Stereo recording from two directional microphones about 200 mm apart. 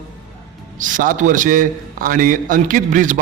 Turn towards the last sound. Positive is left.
turn(degrees=-40)  # may be behind; listen again after turning